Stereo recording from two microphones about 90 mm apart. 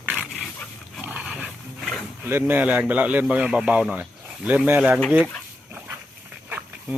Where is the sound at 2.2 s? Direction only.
25° right (ahead or behind); by 5.0 s 10° right (ahead or behind).